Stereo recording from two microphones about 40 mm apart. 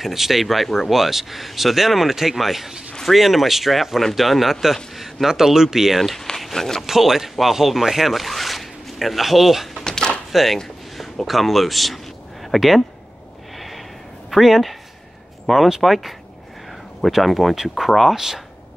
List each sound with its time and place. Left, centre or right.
0.0 s speech: centre
5.9 s speech: centre
6.3 s a sound: centre
6.9 s speech: centre
9.8 s door: centre
10.3 s speech: centre
13.6 s a sound: centre
14.3 s speech: centre